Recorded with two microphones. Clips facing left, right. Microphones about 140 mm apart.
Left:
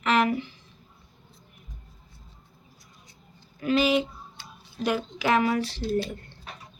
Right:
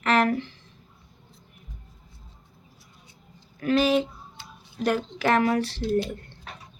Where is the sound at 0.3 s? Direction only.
10° left (ahead or behind).